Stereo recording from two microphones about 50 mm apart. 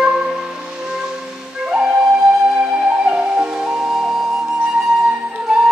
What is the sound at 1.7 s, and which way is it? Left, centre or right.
Flute, centre.